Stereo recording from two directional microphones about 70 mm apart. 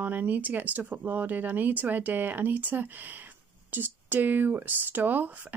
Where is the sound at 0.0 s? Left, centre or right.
Right.